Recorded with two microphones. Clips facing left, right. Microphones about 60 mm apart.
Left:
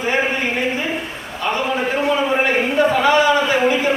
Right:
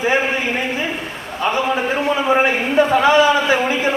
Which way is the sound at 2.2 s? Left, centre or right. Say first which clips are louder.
Right 1 dB; centre.